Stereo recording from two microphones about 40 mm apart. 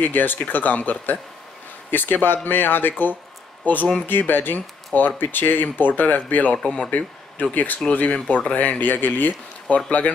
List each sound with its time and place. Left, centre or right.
0.0 s speech: left
1.9 s speech: left
6.6 s speech: left
6.9 s speech: left
9.7 s speech: left